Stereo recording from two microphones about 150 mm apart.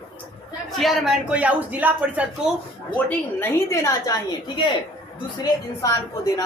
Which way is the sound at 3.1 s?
15° left (ahead or behind).